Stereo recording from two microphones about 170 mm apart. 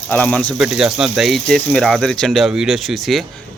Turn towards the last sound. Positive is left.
turn(degrees=0)  # may be behind; listen again after turning